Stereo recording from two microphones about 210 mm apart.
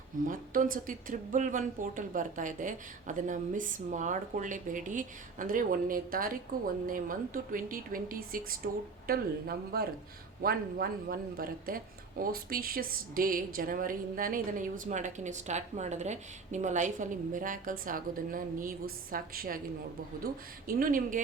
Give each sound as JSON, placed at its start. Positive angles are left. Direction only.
{"t": 0.3, "sound": "a woman's voice", "side_deg": -40}
{"t": 20.7, "sound": "a woman's voice", "side_deg": -40}